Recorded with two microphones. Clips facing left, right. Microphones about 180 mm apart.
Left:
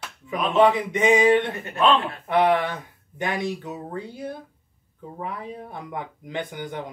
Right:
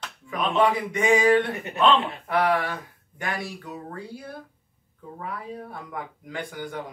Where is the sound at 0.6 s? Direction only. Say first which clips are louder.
Left 5 dB; 20° left (ahead or behind).